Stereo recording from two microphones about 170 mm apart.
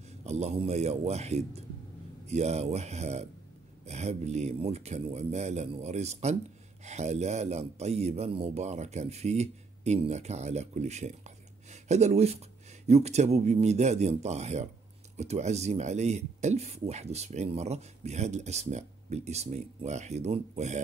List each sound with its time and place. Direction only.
0.2 s speech: 40° right (ahead or behind)